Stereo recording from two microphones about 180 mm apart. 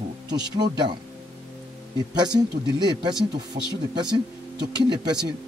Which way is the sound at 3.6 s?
55° right (ahead or behind).